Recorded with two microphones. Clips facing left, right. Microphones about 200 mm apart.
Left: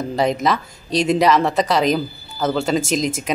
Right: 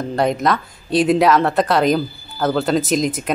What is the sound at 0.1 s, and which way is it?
Speech, centre (ahead or behind).